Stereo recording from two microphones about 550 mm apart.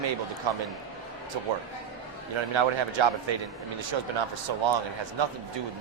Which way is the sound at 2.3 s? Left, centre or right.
Right.